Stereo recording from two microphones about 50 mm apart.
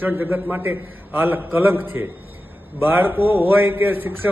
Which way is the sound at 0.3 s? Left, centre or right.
Right.